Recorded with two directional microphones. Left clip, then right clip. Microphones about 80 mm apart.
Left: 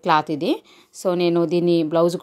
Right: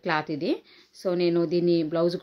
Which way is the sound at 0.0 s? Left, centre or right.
Left.